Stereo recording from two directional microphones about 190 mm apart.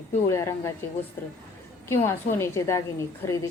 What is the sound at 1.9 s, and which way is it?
Speech, 15° left (ahead or behind).